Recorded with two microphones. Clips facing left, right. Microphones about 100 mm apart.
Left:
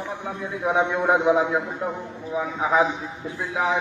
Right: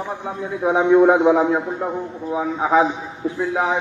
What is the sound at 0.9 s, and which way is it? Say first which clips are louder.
A man's voice: right 9 dB; 35° right (ahead or behind).